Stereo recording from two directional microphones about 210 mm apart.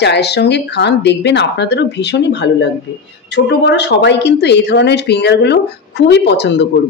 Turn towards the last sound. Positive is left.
turn(degrees=55)  # may be behind; listen again after turning